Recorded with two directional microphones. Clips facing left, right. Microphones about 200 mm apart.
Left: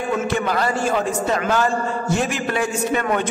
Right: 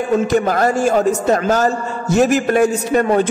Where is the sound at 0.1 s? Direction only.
45° right (ahead or behind).